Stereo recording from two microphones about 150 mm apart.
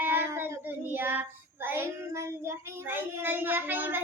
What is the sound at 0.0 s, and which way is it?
Child singing, 15° right (ahead or behind).